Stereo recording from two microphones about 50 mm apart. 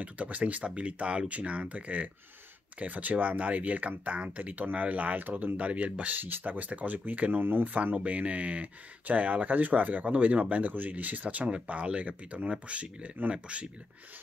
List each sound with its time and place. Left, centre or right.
0.0 s speech: right
6.1 s speech: right
7.4 s speech: right
7.7 s speech: right